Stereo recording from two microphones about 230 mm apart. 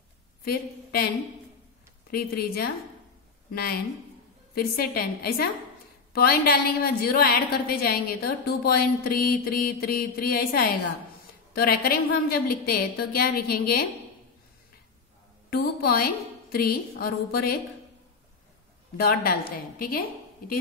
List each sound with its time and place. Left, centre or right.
0.5 s a woman's voice: left
4.6 s a woman's voice: left
15.5 s a woman's voice: left
18.9 s a woman's voice: left